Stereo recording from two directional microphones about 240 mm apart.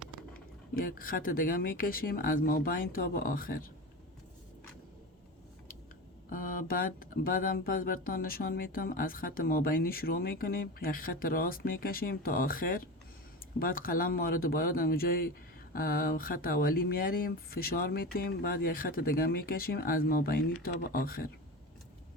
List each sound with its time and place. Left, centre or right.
0.3 s speech: left
6.3 s speech: left